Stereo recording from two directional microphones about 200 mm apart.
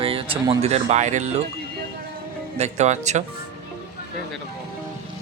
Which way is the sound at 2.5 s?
35° right (ahead or behind).